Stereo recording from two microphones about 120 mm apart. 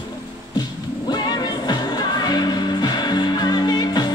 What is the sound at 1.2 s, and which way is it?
Music, 40° left (ahead or behind).